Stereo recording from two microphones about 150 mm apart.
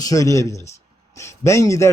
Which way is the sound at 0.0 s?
20° left (ahead or behind).